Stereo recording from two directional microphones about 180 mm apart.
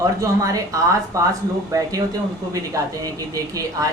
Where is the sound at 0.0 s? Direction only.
20° right (ahead or behind).